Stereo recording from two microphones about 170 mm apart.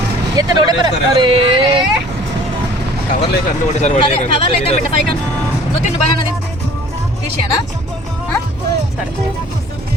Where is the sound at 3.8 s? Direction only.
35° left (ahead or behind).